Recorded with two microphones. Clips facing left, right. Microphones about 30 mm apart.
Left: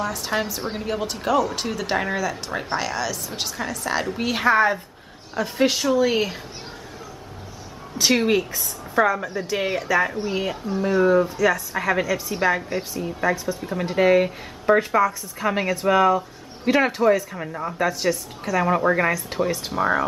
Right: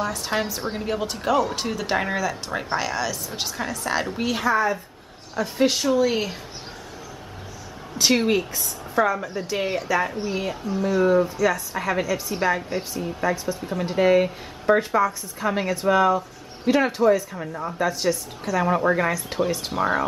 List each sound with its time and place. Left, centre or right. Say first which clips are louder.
0.0 s speech: even; centre
4.1 s speech: left 1 dB; centre
4.5 s a woman's voice: left 4 dB; left
5.4 s speech: even; centre
8.0 s speech: left 1 dB; centre